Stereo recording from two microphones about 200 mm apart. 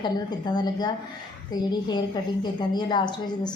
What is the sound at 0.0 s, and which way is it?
A woman's voice, 20° left (ahead or behind).